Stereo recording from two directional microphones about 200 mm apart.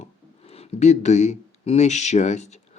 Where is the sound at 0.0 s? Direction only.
30° left (ahead or behind).